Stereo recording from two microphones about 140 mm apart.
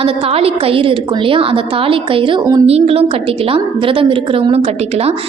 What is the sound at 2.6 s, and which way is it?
A woman's voice, 45° right (ahead or behind).